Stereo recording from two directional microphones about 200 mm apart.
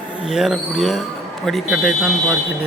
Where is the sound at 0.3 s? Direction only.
Centre (ahead or behind).